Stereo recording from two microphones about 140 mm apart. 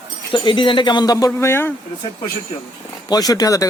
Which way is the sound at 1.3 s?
15° left (ahead or behind).